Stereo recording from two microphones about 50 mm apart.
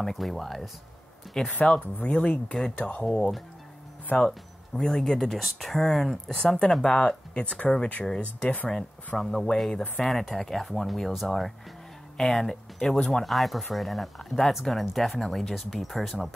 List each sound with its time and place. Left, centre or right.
0.0 s speech: centre
1.5 s speech: left
4.7 s speech: centre
13.2 s speech: centre